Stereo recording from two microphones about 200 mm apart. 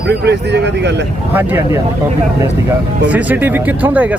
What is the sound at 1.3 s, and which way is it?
Speech, 10° right (ahead or behind).